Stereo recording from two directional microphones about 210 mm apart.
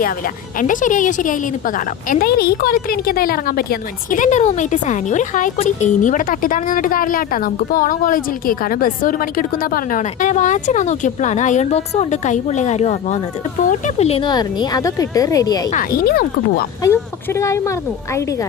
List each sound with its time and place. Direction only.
0.6 s a woman's voice: 40° left (ahead or behind); by 15.7 s 15° left (ahead or behind)
15.7 s speech: 40° left (ahead or behind)
16.8 s a woman's voice: 15° left (ahead or behind)